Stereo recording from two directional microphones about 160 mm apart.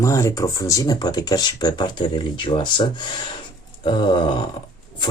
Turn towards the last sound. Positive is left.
turn(degrees=30)  # may be behind; listen again after turning